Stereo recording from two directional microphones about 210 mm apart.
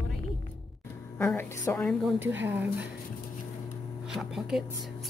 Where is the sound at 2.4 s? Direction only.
10° right (ahead or behind).